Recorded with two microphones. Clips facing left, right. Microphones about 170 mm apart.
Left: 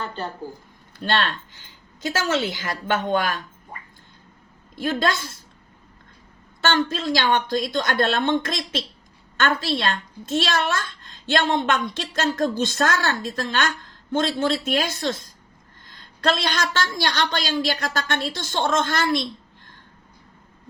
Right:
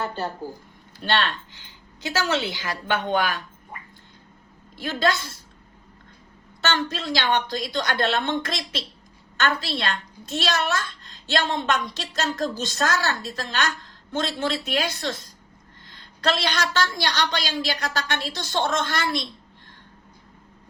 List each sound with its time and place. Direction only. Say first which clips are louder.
0.0 s speech: right 2 dB; 5° right (ahead or behind)
2.0 s a woman's voice: left 2 dB; 45° left (ahead or behind)
4.8 s a woman's voice: left 1 dB; 50° left (ahead or behind)
6.7 s a woman's voice: left 4 dB; 50° left (ahead or behind)